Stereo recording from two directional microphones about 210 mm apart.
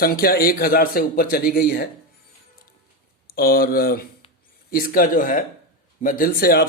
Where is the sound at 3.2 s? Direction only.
45° left (ahead or behind).